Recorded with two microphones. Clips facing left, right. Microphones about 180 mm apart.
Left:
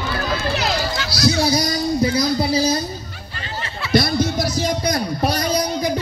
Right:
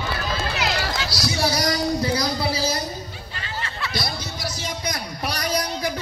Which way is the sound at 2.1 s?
20° left (ahead or behind).